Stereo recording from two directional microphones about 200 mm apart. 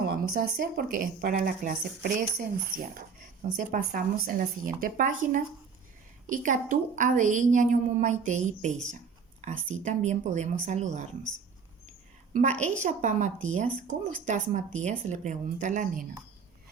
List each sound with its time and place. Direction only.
0.3 s a woman's voice: 45° right (ahead or behind)
12.3 s a woman's voice: 35° right (ahead or behind)